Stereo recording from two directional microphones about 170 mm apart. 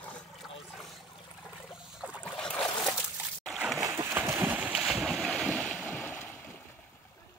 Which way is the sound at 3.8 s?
20° right (ahead or behind).